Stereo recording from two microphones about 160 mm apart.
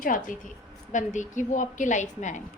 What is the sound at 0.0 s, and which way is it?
A woman's voice, 60° left (ahead or behind).